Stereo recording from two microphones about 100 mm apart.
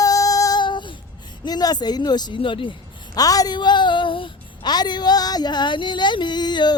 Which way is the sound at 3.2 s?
40° left (ahead or behind).